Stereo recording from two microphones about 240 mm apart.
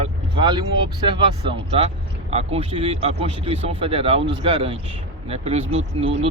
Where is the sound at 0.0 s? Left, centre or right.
Centre.